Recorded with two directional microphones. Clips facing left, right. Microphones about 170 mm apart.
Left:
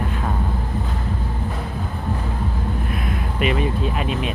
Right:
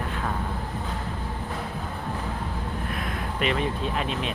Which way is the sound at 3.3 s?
10° left (ahead or behind).